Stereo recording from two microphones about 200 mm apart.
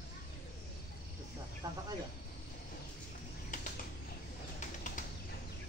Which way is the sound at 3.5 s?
40° left (ahead or behind).